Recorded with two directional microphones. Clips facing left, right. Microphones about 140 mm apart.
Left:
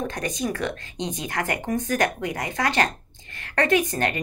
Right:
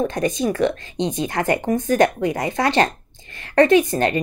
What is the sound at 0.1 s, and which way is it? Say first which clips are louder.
Speech: right 7 dB; 25° right (ahead or behind).